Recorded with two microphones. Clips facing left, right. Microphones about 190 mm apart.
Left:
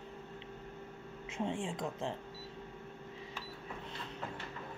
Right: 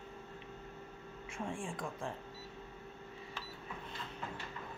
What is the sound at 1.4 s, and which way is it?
Speech, 20° left (ahead or behind).